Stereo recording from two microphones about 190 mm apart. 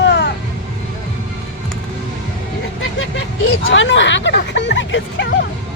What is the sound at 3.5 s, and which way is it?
Hubbub, 85° left.